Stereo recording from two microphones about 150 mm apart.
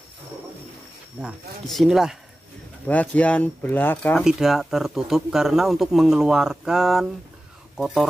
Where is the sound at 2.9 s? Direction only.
10° left (ahead or behind).